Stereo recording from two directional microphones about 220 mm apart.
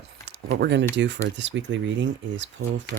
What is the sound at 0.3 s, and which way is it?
Speech, 50° right (ahead or behind).